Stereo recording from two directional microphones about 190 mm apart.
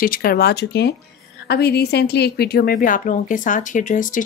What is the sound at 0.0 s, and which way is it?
A woman's voice, 50° left (ahead or behind).